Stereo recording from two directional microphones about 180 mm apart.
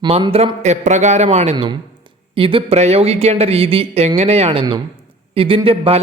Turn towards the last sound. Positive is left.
turn(degrees=-30)  # may be behind; listen again after turning